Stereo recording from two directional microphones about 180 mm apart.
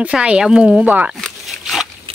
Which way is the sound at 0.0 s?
5° right (ahead or behind).